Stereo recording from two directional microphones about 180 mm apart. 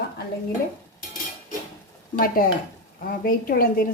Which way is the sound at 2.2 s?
55° left (ahead or behind).